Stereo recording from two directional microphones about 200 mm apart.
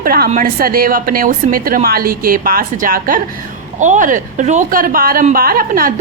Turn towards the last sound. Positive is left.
turn(degrees=-45)  # may be behind; listen again after turning